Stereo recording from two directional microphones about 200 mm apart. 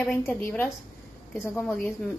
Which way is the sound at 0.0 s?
Centre (ahead or behind).